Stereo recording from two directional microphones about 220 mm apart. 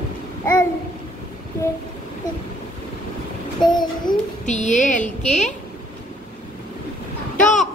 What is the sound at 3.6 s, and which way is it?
Speech, 20° left (ahead or behind).